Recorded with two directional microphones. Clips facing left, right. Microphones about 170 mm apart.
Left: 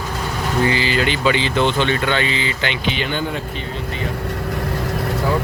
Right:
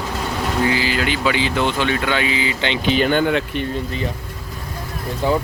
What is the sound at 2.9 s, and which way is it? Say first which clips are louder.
Speech: right 8 dB; 45° right (ahead or behind).